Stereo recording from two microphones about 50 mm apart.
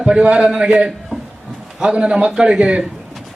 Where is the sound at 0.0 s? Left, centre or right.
Centre.